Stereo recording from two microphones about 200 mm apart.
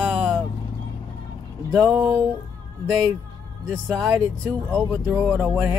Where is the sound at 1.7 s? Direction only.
5° left (ahead or behind).